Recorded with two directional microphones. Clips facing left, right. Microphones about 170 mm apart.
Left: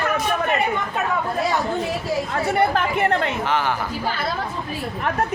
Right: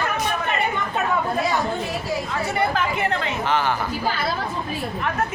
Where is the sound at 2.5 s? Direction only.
55° left (ahead or behind).